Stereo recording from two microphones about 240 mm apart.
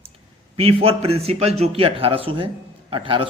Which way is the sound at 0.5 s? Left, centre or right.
Right.